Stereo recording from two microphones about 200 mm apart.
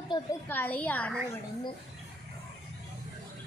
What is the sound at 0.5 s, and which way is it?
Speech, 10° left (ahead or behind).